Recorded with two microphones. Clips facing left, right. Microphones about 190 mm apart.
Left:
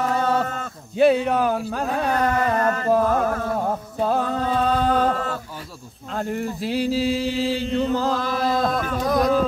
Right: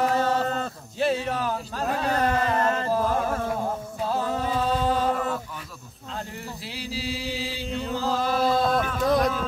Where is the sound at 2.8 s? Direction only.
55° left (ahead or behind).